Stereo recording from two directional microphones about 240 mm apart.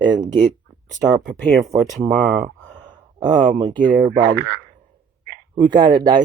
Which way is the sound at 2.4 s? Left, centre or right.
Right.